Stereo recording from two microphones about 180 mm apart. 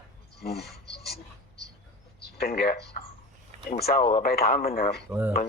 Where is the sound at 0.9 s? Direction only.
60° left (ahead or behind).